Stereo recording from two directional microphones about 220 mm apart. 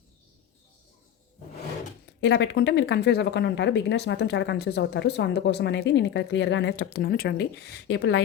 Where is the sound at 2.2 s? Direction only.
50° left (ahead or behind).